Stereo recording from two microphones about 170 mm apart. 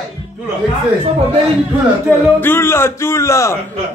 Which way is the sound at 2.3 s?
15° left (ahead or behind).